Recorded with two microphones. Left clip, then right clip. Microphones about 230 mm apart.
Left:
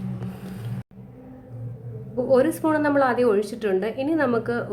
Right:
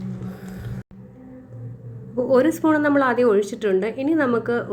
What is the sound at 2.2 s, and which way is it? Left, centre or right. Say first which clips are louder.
A woman's voice: right 2 dB; centre.